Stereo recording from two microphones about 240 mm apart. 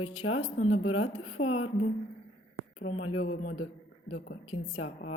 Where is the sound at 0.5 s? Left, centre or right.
Left.